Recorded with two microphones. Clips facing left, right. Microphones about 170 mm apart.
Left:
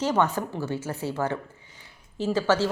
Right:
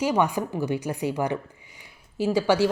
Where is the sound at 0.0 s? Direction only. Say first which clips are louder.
Right 1 dB; 10° right (ahead or behind).